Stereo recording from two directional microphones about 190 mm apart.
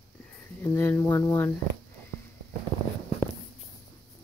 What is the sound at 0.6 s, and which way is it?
Speech, 10° left (ahead or behind).